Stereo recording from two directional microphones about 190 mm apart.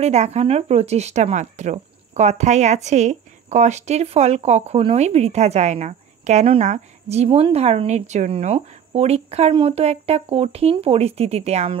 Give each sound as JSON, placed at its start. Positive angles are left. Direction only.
{"t": 0.0, "sound": "speech", "side_deg": -35}